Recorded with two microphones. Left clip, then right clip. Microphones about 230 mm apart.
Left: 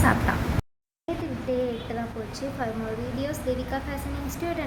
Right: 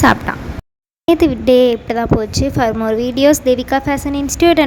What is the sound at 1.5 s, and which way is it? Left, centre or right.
A woman's voice, right.